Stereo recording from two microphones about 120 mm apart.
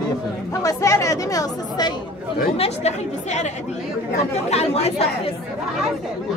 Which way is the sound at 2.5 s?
60° left (ahead or behind).